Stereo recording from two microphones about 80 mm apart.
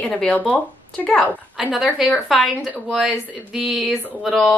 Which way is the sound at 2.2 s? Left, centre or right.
Centre.